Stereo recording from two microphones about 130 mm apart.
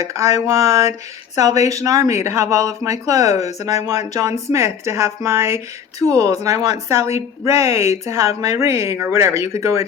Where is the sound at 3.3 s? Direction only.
55° left (ahead or behind).